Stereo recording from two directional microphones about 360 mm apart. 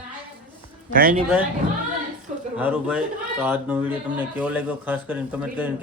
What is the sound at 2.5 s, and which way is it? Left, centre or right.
A man's voice, centre.